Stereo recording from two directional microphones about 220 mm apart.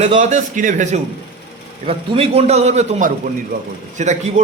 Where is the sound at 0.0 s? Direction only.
30° right (ahead or behind).